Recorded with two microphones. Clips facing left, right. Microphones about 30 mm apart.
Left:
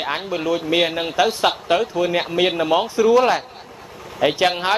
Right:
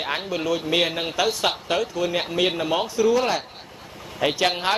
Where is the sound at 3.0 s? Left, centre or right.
Left.